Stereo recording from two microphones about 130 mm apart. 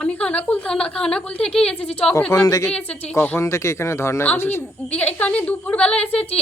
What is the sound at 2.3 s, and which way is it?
A woman's voice, 25° left (ahead or behind).